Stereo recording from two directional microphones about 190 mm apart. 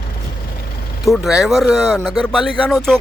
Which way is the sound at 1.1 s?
Centre (ahead or behind).